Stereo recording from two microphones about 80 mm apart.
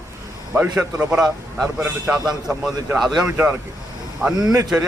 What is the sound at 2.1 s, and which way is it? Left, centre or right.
Speech, right.